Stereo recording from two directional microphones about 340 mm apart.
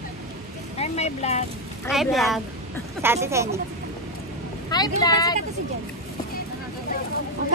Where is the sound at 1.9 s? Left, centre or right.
Centre.